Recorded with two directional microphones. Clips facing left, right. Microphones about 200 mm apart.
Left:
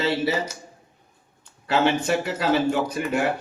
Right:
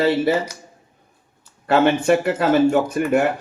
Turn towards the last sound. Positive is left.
turn(degrees=-50)  # may be behind; listen again after turning